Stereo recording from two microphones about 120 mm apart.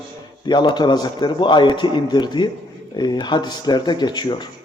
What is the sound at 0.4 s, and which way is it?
A man's voice, 40° left (ahead or behind).